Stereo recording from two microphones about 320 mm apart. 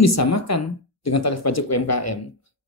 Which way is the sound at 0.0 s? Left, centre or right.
Left.